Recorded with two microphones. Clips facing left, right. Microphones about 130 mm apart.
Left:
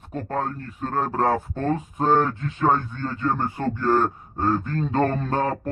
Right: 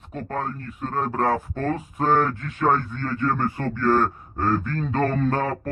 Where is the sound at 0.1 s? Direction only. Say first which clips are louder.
Left 2 dB; 35° left (ahead or behind).